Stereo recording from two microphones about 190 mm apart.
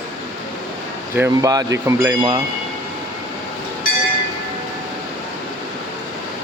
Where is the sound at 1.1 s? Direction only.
15° right (ahead or behind).